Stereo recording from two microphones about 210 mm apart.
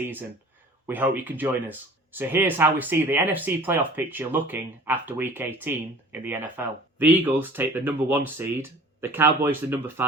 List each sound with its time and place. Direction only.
0.0 s speech: 10° right (ahead or behind)